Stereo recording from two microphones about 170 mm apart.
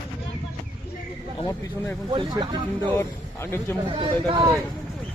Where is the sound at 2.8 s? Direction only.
15° left (ahead or behind).